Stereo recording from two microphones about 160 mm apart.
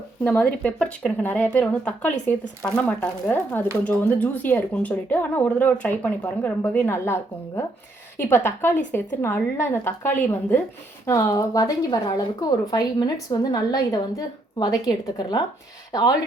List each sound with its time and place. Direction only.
0.3 s a woman's voice: 10° left (ahead or behind); by 16.1 s 25° left (ahead or behind)